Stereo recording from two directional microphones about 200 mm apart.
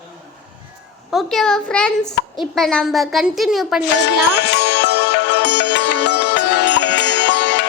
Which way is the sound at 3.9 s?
55° left (ahead or behind).